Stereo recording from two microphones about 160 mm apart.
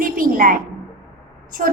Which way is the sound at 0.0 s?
60° right (ahead or behind).